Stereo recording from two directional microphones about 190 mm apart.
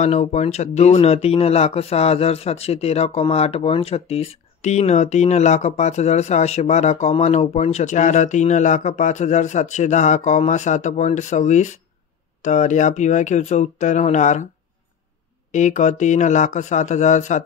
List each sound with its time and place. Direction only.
0.0 s speech: 35° left (ahead or behind)
15.5 s speech: 40° left (ahead or behind)